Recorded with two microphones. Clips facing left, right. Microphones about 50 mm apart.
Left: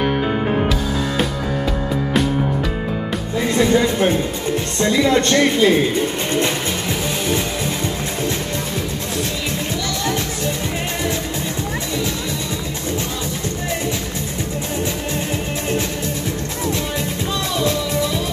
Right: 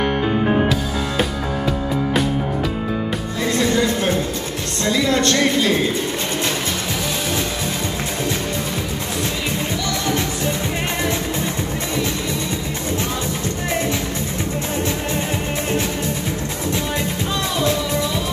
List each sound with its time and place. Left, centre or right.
3.5 s speech: centre
17.6 s music: centre